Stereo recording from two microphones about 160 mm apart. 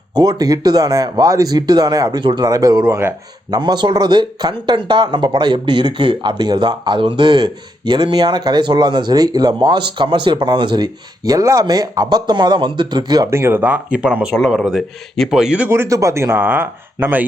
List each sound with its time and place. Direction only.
0.1 s speech: 25° right (ahead or behind)